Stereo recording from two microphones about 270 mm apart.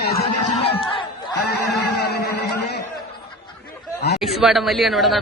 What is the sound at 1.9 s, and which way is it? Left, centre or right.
Speech, left.